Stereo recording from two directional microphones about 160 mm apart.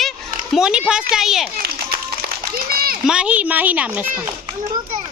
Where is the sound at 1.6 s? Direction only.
75° right (ahead or behind).